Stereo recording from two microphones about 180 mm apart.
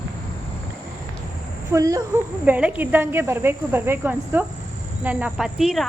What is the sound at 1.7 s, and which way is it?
A woman's voice, 20° right (ahead or behind).